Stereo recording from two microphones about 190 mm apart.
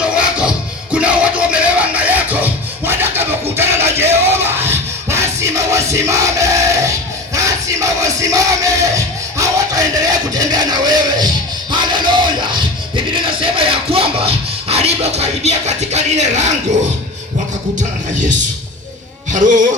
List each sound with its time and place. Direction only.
0.0 s music: 5° right (ahead or behind)
7.3 s crowd: 15° right (ahead or behind)
9.4 s music: 20° right (ahead or behind); by 16.5 s 40° right (ahead or behind)
19.3 s speech: 40° right (ahead or behind)